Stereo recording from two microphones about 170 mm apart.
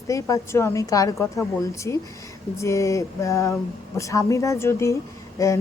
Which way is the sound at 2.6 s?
20° left (ahead or behind).